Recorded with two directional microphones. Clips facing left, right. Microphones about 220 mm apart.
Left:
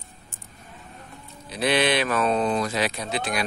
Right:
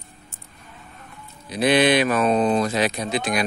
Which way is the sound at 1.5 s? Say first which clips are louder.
Right 5 dB; 15° right (ahead or behind).